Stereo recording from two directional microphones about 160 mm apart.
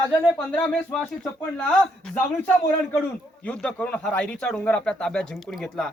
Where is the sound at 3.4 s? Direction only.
5° left (ahead or behind).